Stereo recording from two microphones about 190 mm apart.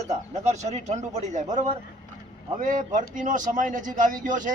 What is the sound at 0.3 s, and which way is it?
A man's voice, 40° right (ahead or behind).